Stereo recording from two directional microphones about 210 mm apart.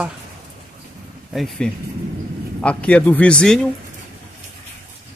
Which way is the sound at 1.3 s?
Centre (ahead or behind).